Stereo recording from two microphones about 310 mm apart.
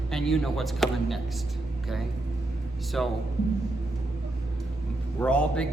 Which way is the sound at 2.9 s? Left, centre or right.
Centre.